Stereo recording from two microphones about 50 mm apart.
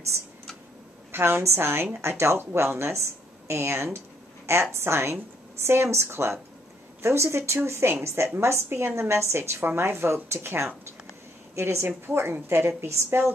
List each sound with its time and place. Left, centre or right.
1.1 s a woman's voice: right
11.5 s a woman's voice: right